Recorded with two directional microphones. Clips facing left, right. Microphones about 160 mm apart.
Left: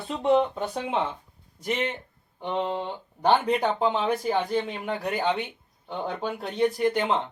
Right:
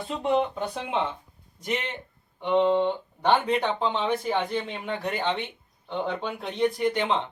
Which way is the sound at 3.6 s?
10° left (ahead or behind).